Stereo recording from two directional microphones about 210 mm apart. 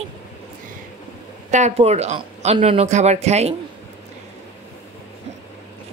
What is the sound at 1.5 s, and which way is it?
Speech, 30° right (ahead or behind).